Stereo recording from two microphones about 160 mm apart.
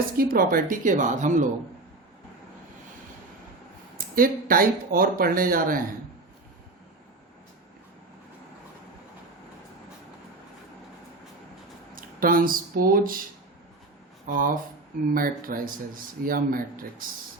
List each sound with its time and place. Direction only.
0.2 s speech: 65° right (ahead or behind)
3.9 s speech: 60° right (ahead or behind)
11.9 s speech: 60° right (ahead or behind)
14.3 s speech: 60° right (ahead or behind)